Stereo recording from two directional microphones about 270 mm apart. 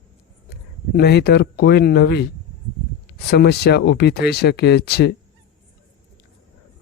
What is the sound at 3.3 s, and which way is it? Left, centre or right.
A man's voice, left.